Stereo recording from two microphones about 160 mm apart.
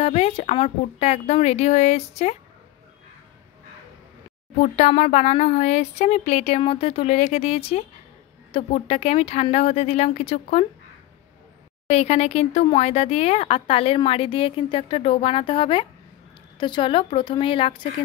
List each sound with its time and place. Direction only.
0.0 s speech: 40° left (ahead or behind)
4.6 s a woman's voice: 45° left (ahead or behind)
11.9 s a woman's voice: 40° left (ahead or behind)